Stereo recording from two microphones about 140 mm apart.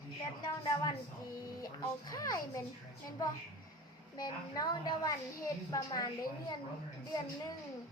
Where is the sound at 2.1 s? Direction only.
25° left (ahead or behind).